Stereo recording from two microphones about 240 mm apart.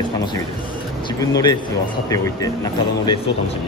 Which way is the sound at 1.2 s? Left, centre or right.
Centre.